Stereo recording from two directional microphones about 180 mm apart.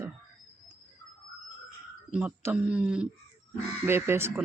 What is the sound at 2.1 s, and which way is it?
Speech, 5° right (ahead or behind).